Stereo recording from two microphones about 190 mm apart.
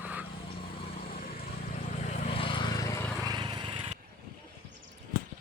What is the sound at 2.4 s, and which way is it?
Vehicle, 25° left (ahead or behind).